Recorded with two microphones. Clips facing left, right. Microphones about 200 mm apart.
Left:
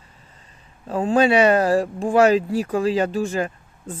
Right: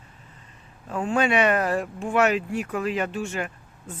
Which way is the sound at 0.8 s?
35° left (ahead or behind).